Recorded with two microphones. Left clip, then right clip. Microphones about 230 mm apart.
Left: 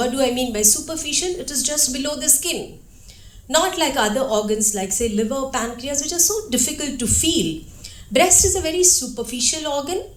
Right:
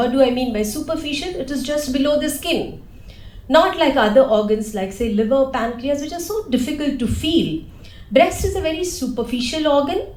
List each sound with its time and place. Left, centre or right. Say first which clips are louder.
0.0 s a woman's voice: right 4 dB; left